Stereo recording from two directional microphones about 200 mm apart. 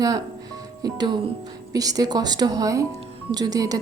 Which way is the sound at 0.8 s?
20° right (ahead or behind).